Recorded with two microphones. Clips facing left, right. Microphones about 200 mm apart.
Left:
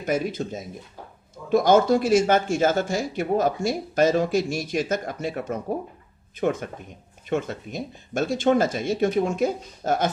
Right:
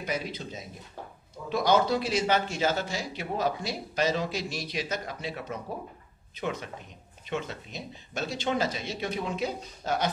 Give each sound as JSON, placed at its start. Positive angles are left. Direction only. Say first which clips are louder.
{"t": 0.0, "sound": "speech", "louder": "left 8 dB", "side_deg": 50}